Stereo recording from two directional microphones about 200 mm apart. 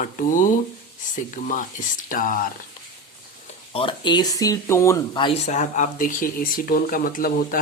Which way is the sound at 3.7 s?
25° left (ahead or behind).